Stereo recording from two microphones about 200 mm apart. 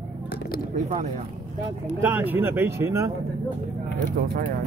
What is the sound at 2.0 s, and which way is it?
Speech, 10° right (ahead or behind).